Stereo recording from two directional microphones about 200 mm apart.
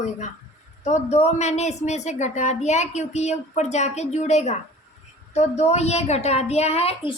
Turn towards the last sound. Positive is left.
turn(degrees=30)  # may be behind; listen again after turning